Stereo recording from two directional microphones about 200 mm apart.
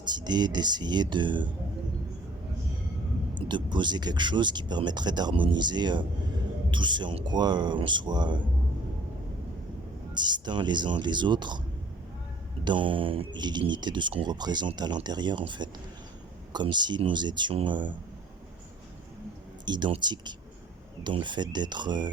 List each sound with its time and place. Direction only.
0.0 s speech: 20° right (ahead or behind)
3.3 s speech: 20° right (ahead or behind)
10.2 s speech: 20° right (ahead or behind)
12.6 s speech: 25° right (ahead or behind)
19.6 s speech: 20° right (ahead or behind)